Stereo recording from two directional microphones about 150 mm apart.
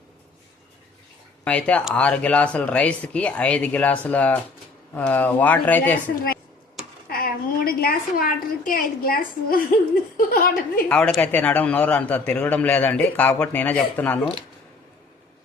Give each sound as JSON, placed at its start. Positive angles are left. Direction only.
{"t": 1.5, "sound": "a man's voice", "side_deg": 10}
{"t": 7.1, "sound": "a woman's voice", "side_deg": 80}
{"t": 10.8, "sound": "a man's voice", "side_deg": 5}